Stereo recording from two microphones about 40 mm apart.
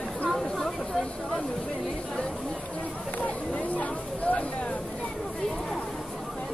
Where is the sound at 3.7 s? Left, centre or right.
Left.